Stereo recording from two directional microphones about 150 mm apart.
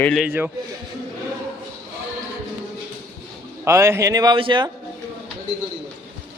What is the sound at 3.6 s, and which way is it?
A man's voice, 20° right (ahead or behind).